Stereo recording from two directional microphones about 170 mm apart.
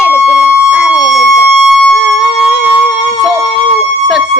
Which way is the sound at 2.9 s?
30° left (ahead or behind).